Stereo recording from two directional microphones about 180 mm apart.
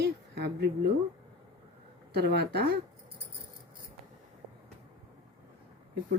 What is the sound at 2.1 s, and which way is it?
Speech, 65° right (ahead or behind).